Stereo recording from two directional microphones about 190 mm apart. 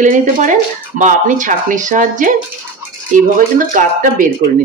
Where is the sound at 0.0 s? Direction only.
40° right (ahead or behind).